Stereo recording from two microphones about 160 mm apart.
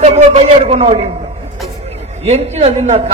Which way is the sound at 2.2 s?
40° right (ahead or behind).